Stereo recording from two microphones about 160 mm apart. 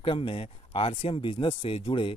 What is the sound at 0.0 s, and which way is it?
Speech, 35° left (ahead or behind).